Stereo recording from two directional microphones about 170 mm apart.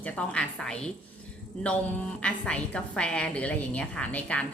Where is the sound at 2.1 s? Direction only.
5° left (ahead or behind).